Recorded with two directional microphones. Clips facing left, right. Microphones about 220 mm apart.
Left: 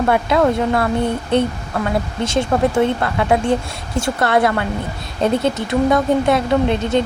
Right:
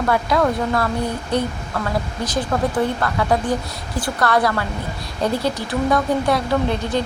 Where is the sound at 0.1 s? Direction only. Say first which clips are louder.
Left 2 dB; 25° left (ahead or behind).